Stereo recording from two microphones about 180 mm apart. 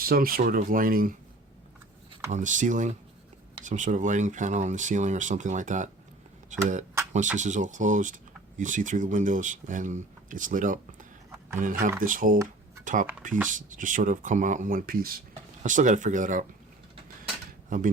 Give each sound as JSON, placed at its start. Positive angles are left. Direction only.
{"t": 0.0, "sound": "speech", "side_deg": -55}
{"t": 2.3, "sound": "speech", "side_deg": -45}
{"t": 17.7, "sound": "speech", "side_deg": -45}